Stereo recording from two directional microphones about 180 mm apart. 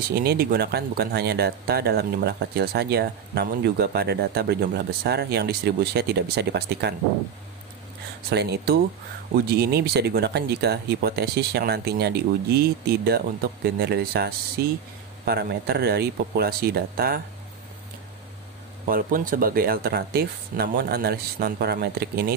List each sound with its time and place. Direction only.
0.1 s speech: 60° right (ahead or behind)
8.3 s speech: 65° right (ahead or behind)
18.9 s speech: 50° right (ahead or behind)